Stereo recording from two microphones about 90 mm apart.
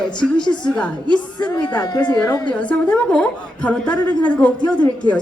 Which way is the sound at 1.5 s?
55° left (ahead or behind).